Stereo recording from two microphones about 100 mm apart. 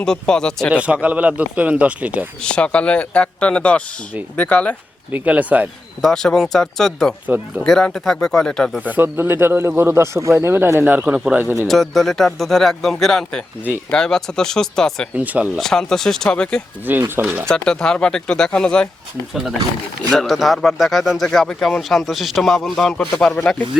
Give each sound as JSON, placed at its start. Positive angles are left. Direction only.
{"t": 0.0, "sound": "speech", "side_deg": 5}
{"t": 0.7, "sound": "speech", "side_deg": -10}
{"t": 2.4, "sound": "speech", "side_deg": 10}
{"t": 5.1, "sound": "speech", "side_deg": -15}
{"t": 6.0, "sound": "a man's voice", "side_deg": 5}
{"t": 7.3, "sound": "speech", "side_deg": -15}
{"t": 7.6, "sound": "a man's voice", "side_deg": 5}
{"t": 8.8, "sound": "a man's voice", "side_deg": -20}
{"t": 11.7, "sound": "a man's voice", "side_deg": 0}
{"t": 15.1, "sound": "speech", "side_deg": -15}
{"t": 15.5, "sound": "speech", "side_deg": 5}
{"t": 16.8, "sound": "a man's voice", "side_deg": -20}
{"t": 17.5, "sound": "speech", "side_deg": 5}
{"t": 19.3, "sound": "a man's voice", "side_deg": -5}